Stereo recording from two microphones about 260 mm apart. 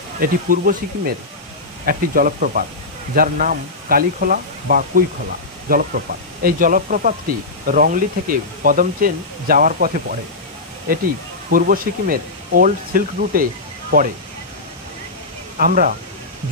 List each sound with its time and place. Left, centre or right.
0.2 s speech: right
15.5 s speech: right